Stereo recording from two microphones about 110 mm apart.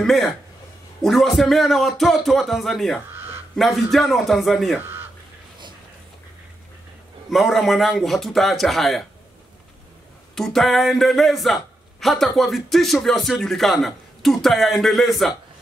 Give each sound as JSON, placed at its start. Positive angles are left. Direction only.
{"t": 0.0, "sound": "speech", "side_deg": 0}
{"t": 3.1, "sound": "a sound", "side_deg": -20}
{"t": 3.5, "sound": "speech", "side_deg": 0}
{"t": 4.7, "sound": "a sound", "side_deg": -20}
{"t": 7.2, "sound": "speech", "side_deg": 0}
{"t": 10.3, "sound": "a man's voice", "side_deg": 5}